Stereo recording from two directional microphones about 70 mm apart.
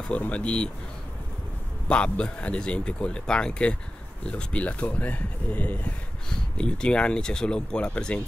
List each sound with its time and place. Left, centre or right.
0.1 s speech: centre
1.9 s speech: centre